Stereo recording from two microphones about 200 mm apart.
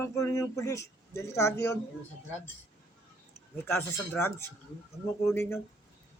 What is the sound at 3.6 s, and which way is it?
Speech, 10° left (ahead or behind).